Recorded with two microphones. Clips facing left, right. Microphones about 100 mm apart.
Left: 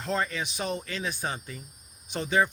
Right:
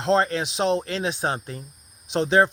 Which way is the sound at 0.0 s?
90° right.